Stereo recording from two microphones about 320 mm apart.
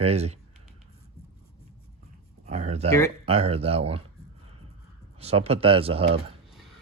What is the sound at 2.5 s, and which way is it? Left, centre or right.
Speech, right.